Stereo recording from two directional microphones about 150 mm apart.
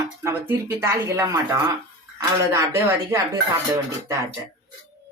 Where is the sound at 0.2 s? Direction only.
15° right (ahead or behind).